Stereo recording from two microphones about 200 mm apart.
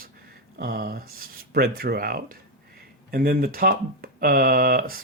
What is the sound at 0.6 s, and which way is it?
Speech, 50° right (ahead or behind).